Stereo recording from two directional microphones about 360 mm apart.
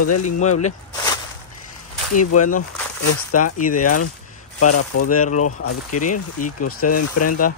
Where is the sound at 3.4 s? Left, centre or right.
Left.